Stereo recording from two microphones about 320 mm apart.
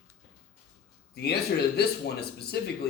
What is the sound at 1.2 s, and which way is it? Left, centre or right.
Speech, left.